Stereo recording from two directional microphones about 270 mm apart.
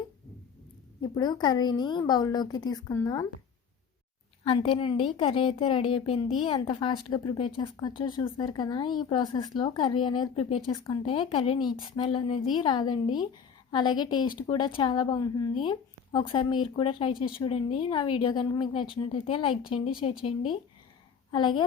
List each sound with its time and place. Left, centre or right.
1.0 s a woman's voice: centre
4.4 s a woman's voice: centre
21.3 s a woman's voice: centre